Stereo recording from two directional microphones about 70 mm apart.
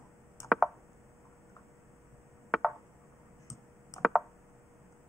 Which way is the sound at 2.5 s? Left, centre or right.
Centre.